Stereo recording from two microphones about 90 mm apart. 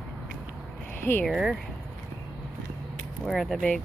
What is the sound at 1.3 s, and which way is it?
Speech, 5° right (ahead or behind).